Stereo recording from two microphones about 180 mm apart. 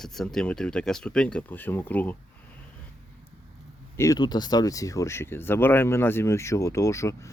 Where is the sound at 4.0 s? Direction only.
20° left (ahead or behind).